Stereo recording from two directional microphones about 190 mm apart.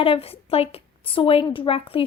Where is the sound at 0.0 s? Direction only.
30° left (ahead or behind).